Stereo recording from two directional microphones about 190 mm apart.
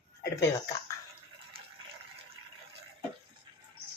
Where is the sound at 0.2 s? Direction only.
15° left (ahead or behind).